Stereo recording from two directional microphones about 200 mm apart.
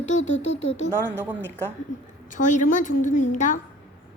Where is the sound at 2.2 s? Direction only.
40° left (ahead or behind).